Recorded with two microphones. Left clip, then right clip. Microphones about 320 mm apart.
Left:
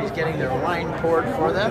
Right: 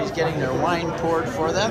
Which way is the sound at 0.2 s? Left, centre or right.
Centre.